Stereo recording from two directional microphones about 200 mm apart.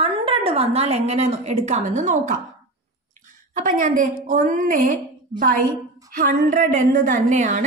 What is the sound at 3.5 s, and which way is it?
A woman's voice, 40° right (ahead or behind).